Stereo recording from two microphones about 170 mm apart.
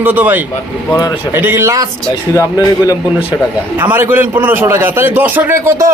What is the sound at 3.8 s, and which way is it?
A man's voice, 10° right (ahead or behind).